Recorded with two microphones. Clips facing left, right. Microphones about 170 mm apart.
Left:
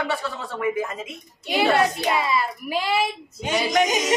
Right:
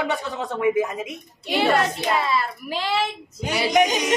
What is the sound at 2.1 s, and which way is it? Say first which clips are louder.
A woman's voice: even; 10° left (ahead or behind).